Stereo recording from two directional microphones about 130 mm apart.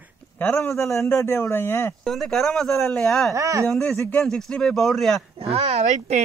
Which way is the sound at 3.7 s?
Centre (ahead or behind).